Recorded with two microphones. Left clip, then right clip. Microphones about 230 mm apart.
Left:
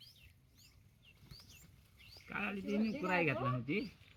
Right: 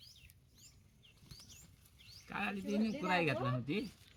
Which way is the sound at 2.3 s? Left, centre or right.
Centre.